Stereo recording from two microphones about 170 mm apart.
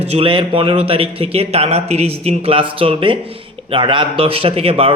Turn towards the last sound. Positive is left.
turn(degrees=-35)  # may be behind; listen again after turning